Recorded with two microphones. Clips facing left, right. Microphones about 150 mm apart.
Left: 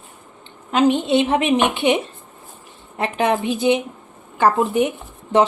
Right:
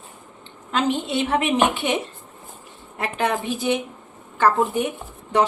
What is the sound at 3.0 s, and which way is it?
Speech, 20° left (ahead or behind).